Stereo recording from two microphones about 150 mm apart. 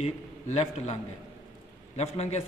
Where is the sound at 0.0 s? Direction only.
45° left (ahead or behind).